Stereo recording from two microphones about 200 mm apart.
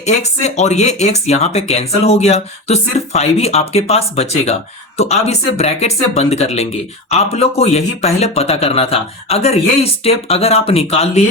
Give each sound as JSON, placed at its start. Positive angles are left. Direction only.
{"t": 0.0, "sound": "speech", "side_deg": 35}